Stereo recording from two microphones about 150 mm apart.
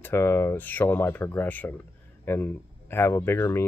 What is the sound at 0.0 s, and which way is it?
Speech, 15° left (ahead or behind).